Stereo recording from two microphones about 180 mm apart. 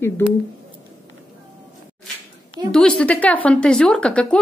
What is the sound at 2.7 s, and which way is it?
Speech, 5° left (ahead or behind).